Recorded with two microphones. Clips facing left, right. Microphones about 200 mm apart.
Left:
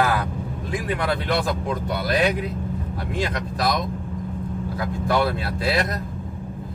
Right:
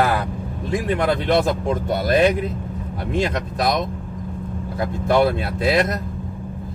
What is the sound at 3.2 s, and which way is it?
Speech, 20° right (ahead or behind).